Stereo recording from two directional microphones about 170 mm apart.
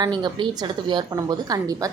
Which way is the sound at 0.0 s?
25° right (ahead or behind).